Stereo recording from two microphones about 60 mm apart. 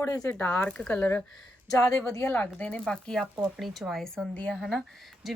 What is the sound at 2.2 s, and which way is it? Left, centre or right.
Speech, left.